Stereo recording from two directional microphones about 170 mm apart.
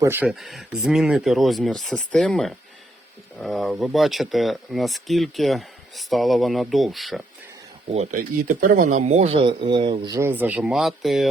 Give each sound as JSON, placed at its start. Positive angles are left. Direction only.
{"t": 0.0, "sound": "speech", "side_deg": -10}
{"t": 7.9, "sound": "speech", "side_deg": -45}
{"t": 10.2, "sound": "speech", "side_deg": -10}